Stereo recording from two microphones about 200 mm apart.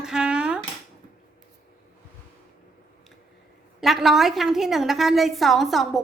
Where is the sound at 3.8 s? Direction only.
Centre (ahead or behind).